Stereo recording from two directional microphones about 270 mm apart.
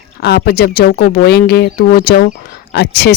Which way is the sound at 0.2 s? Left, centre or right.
Left.